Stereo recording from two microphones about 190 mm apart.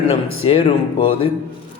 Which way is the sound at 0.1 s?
30° left (ahead or behind).